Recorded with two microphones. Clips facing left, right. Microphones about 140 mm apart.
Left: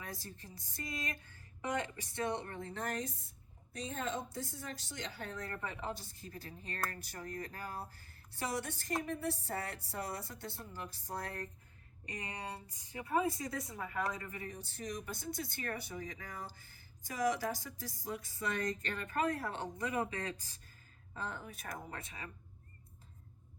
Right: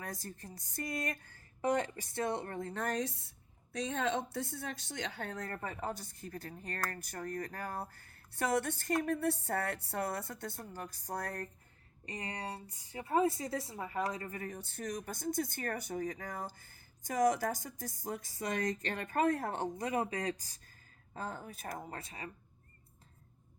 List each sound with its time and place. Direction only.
0.0 s a woman's voice: 45° right (ahead or behind)
2.7 s a woman's voice: 65° right (ahead or behind); by 11.4 s 45° right (ahead or behind)
12.0 s a woman's voice: 30° right (ahead or behind)